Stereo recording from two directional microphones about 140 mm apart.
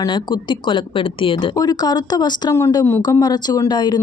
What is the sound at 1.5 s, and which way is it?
Speech, 30° left (ahead or behind).